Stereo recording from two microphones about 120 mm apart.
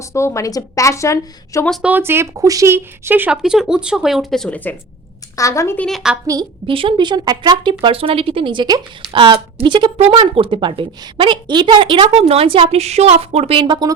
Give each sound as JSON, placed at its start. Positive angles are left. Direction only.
{"t": 0.1, "sound": "a woman's voice", "side_deg": 25}
{"t": 1.8, "sound": "speech", "side_deg": -15}
{"t": 3.4, "sound": "speech", "side_deg": -5}
{"t": 5.4, "sound": "a woman's voice", "side_deg": 25}
{"t": 5.7, "sound": "a woman's voice", "side_deg": 10}
{"t": 6.3, "sound": "speech", "side_deg": -30}
{"t": 6.7, "sound": "a woman's voice", "side_deg": -45}